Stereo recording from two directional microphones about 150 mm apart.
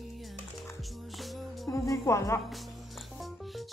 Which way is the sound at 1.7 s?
20° left (ahead or behind).